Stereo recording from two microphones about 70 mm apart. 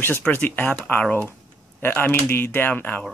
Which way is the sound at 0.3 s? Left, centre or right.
Left.